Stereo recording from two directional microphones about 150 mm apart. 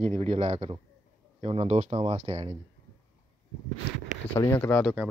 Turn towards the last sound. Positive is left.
turn(degrees=15)  # may be behind; listen again after turning